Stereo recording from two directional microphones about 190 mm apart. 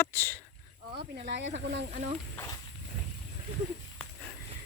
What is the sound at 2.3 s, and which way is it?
Speech, 15° left (ahead or behind).